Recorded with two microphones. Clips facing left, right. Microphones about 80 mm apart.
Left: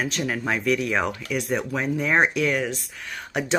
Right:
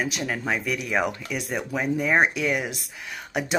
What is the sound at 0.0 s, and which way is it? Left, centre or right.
Speech, centre.